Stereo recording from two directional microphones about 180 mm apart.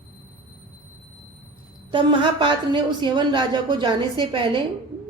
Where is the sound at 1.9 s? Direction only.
25° right (ahead or behind).